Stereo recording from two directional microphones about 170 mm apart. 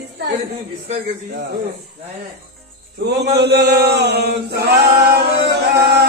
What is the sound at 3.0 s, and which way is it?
Chant, 75° right (ahead or behind).